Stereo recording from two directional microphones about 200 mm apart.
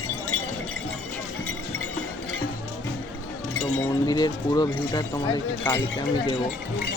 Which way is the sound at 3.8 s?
20° left (ahead or behind).